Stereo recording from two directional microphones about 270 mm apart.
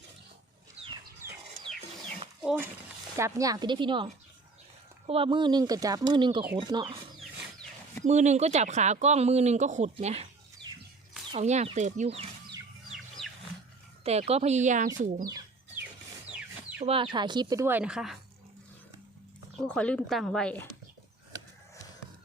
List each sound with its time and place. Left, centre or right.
1.2 s chicken: centre
2.4 s speech: centre
8.0 s speech: right
12.9 s a sound: centre
14.0 s speech: right
16.8 s speech: centre
19.5 s speech: centre